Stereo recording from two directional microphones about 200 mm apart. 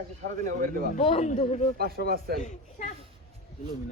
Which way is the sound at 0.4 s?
45° right (ahead or behind).